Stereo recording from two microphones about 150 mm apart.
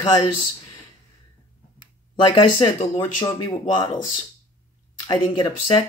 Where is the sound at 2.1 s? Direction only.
35° left (ahead or behind).